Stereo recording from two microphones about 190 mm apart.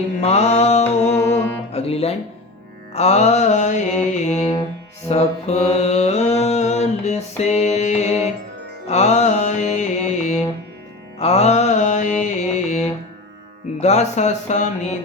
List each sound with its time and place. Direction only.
0.2 s mantra: 35° left (ahead or behind)
1.2 s music: 10° left (ahead or behind)
1.7 s speech: 30° left (ahead or behind)
2.9 s music: 35° left (ahead or behind)
5.0 s mantra: 35° left (ahead or behind)
8.9 s music: 35° left (ahead or behind)
11.2 s mantra: 35° left (ahead or behind)
13.7 s music: 35° left (ahead or behind)